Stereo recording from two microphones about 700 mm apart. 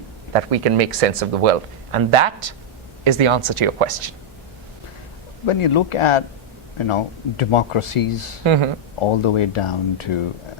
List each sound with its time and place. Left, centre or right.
0.3 s speech: right
5.5 s speech: left
8.4 s speech: right
9.0 s speech: left